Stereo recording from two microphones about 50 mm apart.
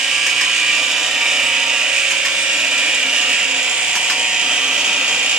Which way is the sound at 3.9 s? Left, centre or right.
Centre.